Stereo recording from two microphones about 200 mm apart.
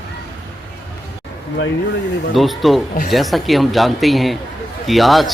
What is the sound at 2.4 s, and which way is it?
A man's voice, centre (ahead or behind).